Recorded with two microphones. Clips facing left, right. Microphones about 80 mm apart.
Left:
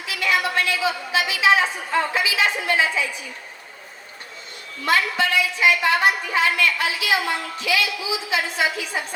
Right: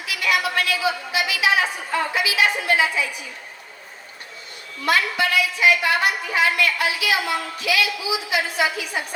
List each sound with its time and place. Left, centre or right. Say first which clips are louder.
0.0 s a woman's voice: even; left
4.9 s a woman's voice: even; left